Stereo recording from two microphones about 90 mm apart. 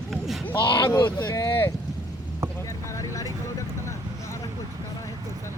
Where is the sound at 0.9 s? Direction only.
50° left (ahead or behind).